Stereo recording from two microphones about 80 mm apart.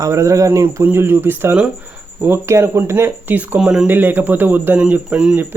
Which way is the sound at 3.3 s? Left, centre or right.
Right.